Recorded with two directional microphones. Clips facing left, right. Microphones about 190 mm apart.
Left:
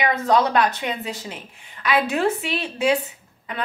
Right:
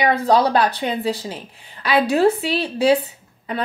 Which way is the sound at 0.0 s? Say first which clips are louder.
Right 3 dB; 35° right (ahead or behind).